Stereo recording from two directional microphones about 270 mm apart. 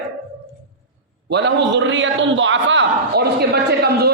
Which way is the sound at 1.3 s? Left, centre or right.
Right.